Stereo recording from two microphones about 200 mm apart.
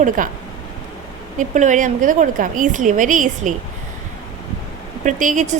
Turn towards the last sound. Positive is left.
turn(degrees=-40)  # may be behind; listen again after turning